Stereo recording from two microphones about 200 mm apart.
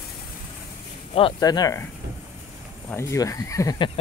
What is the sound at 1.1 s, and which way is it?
Speech, 25° left (ahead or behind).